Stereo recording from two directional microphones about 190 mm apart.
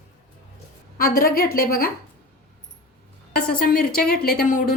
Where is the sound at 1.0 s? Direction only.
50° left (ahead or behind).